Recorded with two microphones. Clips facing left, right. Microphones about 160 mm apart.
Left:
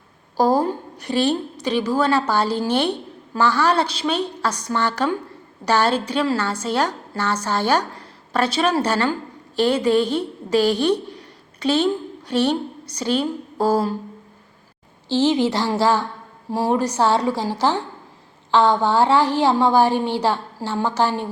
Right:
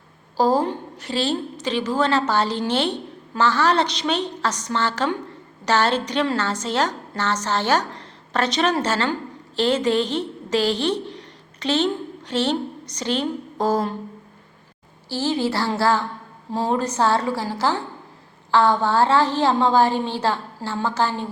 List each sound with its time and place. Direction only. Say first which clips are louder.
0.3 s a woman's voice: left 1 dB; 15° left (ahead or behind)
15.1 s a woman's voice: left 5 dB; 20° left (ahead or behind)